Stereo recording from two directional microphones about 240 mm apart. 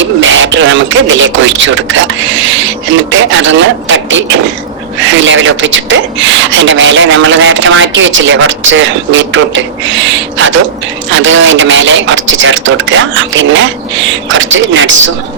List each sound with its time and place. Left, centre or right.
0.0 s speech: right